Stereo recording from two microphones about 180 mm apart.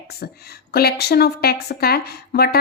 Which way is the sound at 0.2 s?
60° left (ahead or behind).